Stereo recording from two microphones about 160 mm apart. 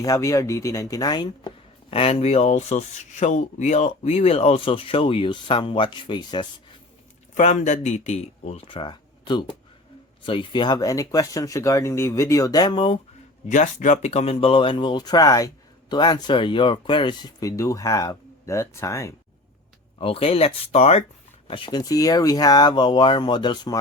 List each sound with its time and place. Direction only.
0.0 s speech: 20° left (ahead or behind)
1.9 s speech: 35° left (ahead or behind)
7.3 s speech: 50° left (ahead or behind); by 13.0 s 30° left (ahead or behind)
13.5 s speech: 50° left (ahead or behind); by 19.1 s 20° left (ahead or behind)
20.0 s speech: 35° left (ahead or behind)
21.4 s speech: 30° left (ahead or behind)